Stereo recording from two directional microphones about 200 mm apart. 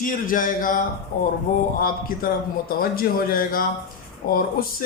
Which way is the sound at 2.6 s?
45° left (ahead or behind).